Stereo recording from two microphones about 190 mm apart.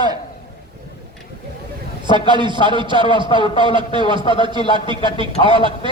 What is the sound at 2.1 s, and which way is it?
A man's voice, 25° right (ahead or behind).